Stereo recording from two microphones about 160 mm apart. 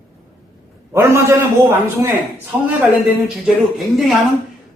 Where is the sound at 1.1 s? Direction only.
20° right (ahead or behind).